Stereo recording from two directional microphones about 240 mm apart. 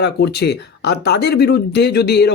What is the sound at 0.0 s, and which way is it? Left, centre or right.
Speech, left.